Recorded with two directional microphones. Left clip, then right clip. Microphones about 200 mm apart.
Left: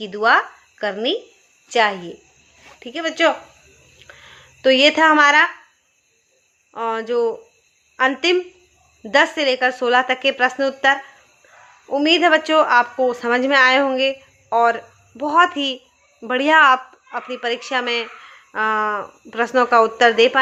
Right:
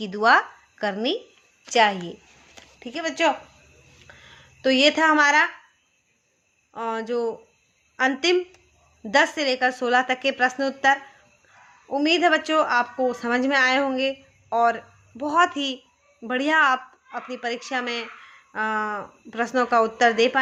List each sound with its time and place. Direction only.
0.0 s speech: 20° right (ahead or behind)
4.0 s a sound: 5° right (ahead or behind)
6.7 s speech: 5° right (ahead or behind)